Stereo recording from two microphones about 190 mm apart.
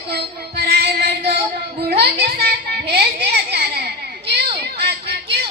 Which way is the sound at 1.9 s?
55° right (ahead or behind).